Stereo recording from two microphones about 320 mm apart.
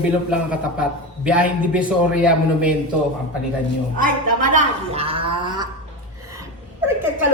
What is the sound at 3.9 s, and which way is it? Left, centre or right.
Speech, right.